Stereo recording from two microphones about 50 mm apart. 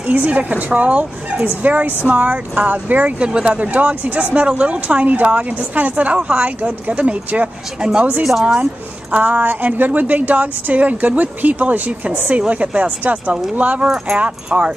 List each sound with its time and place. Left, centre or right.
0.0 s a woman's voice: right
3.2 s speech: right
8.2 s speech: centre
9.1 s a woman's voice: right